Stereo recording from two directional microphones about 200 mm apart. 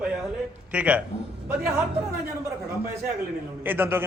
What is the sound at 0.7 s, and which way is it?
A man's voice, 5° right (ahead or behind).